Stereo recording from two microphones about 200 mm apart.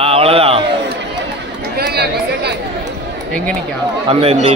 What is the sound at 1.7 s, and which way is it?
Chatter, 55° right (ahead or behind).